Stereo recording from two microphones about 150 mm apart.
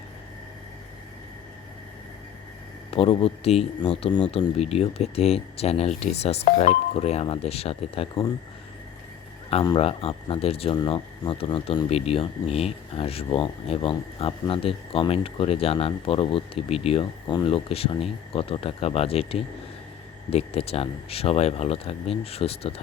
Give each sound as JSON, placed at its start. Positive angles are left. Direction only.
{"t": 2.9, "sound": "speech", "side_deg": 40}
{"t": 9.7, "sound": "speech", "side_deg": 40}